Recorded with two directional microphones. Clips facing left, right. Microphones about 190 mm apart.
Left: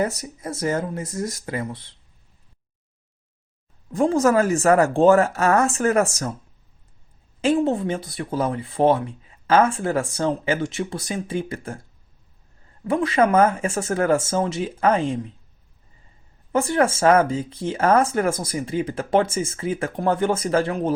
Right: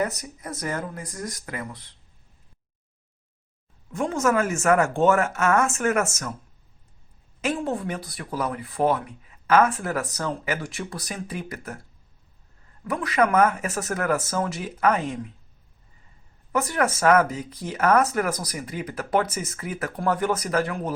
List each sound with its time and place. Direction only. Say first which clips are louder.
0.0 s speech: left 3 dB; 25° left (ahead or behind)
3.9 s speech: left 5 dB; 35° left (ahead or behind)
7.4 s speech: left 7 dB; 25° left (ahead or behind)
12.8 s speech: left 4 dB; 25° left (ahead or behind)
16.5 s speech: left 4 dB; 25° left (ahead or behind)